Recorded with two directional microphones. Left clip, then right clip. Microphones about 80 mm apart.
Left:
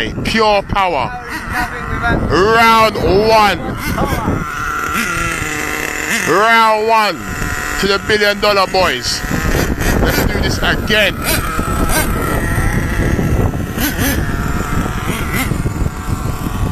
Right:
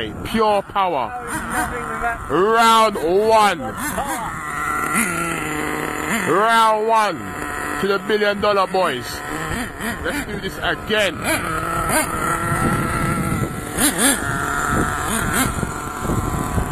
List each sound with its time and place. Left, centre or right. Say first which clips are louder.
0.3 s speech: left 5 dB; left
2.3 s speech: left 4 dB; left
6.0 s a sound: left 5 dB; right
6.3 s speech: left 5 dB; left
10.6 s speech: left 5 dB; left